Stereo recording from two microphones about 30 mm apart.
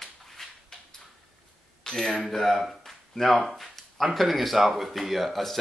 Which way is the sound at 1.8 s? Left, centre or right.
Left.